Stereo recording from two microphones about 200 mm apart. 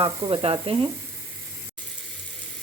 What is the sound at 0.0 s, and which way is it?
Sizzle, 25° right (ahead or behind).